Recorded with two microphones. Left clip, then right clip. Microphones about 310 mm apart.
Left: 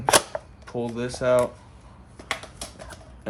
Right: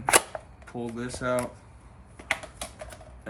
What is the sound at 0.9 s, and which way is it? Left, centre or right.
Cutlery, left.